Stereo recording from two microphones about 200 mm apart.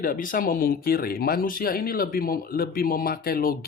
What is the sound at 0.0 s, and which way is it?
Speech, 45° left (ahead or behind).